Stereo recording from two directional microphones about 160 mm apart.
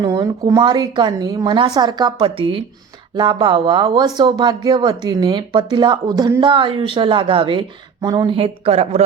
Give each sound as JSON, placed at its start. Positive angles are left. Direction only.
{"t": 0.0, "sound": "a woman's voice", "side_deg": -25}
{"t": 8.4, "sound": "a woman's voice", "side_deg": -40}